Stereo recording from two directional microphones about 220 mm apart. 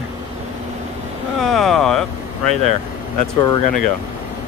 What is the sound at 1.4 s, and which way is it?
Speech, centre (ahead or behind).